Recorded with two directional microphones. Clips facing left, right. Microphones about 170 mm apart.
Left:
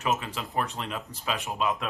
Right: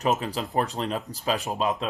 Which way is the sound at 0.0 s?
35° right (ahead or behind).